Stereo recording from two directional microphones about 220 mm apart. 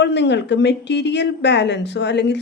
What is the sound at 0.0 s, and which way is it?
A woman's voice, 50° left (ahead or behind).